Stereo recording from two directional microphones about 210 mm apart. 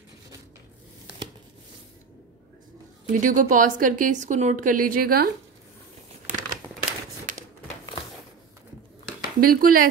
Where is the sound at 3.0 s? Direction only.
40° right (ahead or behind).